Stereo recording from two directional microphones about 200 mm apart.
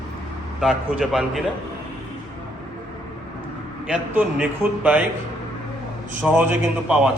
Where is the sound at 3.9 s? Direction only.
5° right (ahead or behind).